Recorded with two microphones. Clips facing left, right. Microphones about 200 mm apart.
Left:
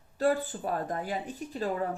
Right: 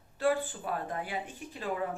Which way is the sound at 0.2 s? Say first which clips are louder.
Left 2 dB; 40° left (ahead or behind).